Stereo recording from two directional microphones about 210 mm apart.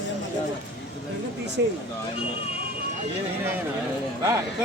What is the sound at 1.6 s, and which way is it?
Speech, 55° right (ahead or behind).